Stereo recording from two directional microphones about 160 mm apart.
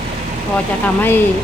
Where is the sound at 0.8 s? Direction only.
15° left (ahead or behind).